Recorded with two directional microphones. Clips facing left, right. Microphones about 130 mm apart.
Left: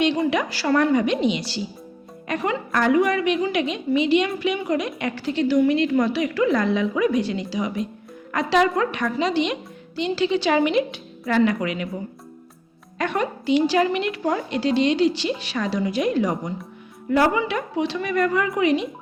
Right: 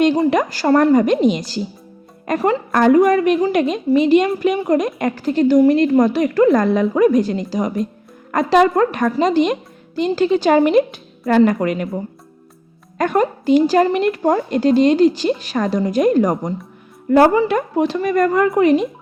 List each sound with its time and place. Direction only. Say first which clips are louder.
0.0 s a woman's voice: right 6 dB; 45° right (ahead or behind)